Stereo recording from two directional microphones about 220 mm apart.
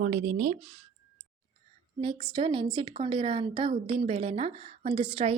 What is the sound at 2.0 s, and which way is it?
A woman's voice, 20° right (ahead or behind).